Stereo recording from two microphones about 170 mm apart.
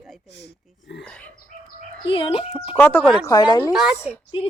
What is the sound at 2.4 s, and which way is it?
Speech, 5° right (ahead or behind).